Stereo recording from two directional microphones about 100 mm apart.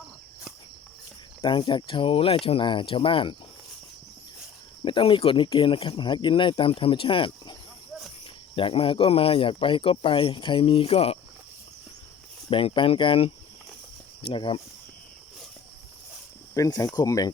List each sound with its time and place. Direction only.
1.4 s speech: 50° left (ahead or behind)
4.9 s speech: 55° left (ahead or behind)
8.5 s speech: 65° left (ahead or behind)
12.5 s speech: 60° left (ahead or behind)
16.6 s speech: 35° left (ahead or behind)